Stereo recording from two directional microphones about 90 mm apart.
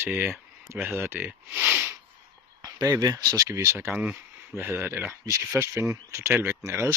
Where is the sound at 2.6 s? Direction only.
45° right (ahead or behind).